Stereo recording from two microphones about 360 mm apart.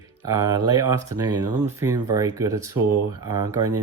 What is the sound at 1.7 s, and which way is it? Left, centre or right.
Speech, centre.